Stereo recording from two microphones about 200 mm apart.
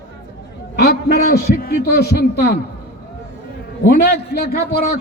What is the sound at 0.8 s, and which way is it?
A man's voice, 55° left (ahead or behind).